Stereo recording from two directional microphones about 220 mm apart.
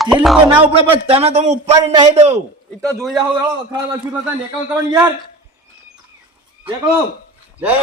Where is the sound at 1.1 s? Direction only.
30° right (ahead or behind).